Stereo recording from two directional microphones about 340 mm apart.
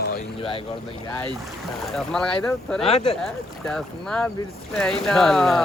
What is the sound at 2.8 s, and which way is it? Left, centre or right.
Speech, centre.